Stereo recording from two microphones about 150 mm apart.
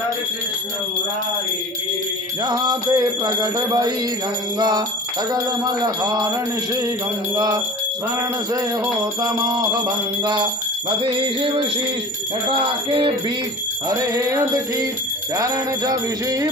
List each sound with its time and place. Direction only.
2.4 s music: 25° right (ahead or behind)
7.3 s music: 25° right (ahead or behind)
9.2 s music: 25° right (ahead or behind)
11.1 s speech: 35° right (ahead or behind)
13.8 s music: 25° right (ahead or behind)